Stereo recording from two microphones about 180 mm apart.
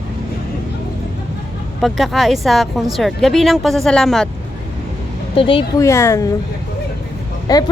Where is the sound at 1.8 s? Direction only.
Centre (ahead or behind).